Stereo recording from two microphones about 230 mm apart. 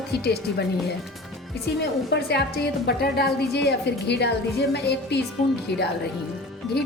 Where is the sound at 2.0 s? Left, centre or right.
Left.